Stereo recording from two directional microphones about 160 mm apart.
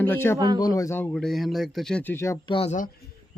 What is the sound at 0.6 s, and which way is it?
Speech, 20° left (ahead or behind).